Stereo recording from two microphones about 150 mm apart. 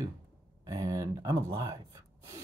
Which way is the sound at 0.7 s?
20° right (ahead or behind).